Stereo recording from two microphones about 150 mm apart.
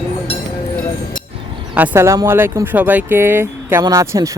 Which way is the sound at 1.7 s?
10° right (ahead or behind).